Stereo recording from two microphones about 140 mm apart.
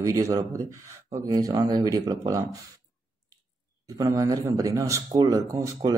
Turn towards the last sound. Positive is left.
turn(degrees=-25)  # may be behind; listen again after turning